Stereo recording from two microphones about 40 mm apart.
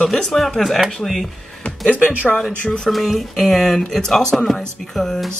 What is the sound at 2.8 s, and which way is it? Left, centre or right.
Speech, centre.